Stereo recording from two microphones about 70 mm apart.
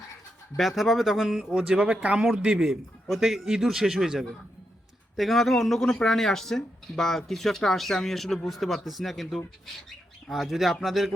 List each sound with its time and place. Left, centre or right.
0.8 s a man's voice: centre